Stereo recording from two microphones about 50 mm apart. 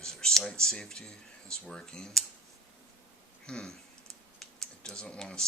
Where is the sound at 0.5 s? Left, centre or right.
Centre.